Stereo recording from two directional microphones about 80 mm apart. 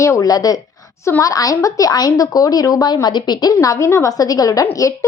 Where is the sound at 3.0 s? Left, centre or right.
Left.